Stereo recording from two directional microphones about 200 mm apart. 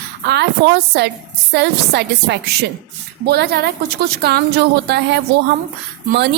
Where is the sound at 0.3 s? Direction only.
55° right (ahead or behind).